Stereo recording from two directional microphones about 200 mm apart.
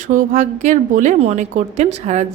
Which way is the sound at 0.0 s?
40° right (ahead or behind).